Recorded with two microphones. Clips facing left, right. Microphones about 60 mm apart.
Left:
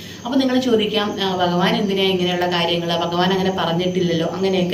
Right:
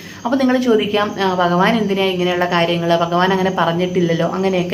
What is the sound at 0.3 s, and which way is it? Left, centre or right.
A woman's voice, right.